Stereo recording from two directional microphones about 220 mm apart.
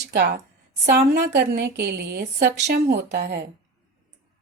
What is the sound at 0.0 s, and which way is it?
A woman's voice, 50° right (ahead or behind).